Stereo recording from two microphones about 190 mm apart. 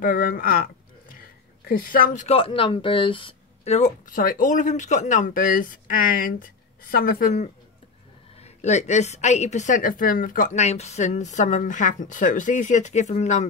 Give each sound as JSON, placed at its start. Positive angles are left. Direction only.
{"t": 0.0, "sound": "speech", "side_deg": 50}
{"t": 1.7, "sound": "speech", "side_deg": 50}
{"t": 2.2, "sound": "a woman's voice", "side_deg": 30}
{"t": 8.4, "sound": "a woman's voice", "side_deg": 35}